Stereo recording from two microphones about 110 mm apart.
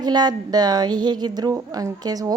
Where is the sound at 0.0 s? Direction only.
40° right (ahead or behind).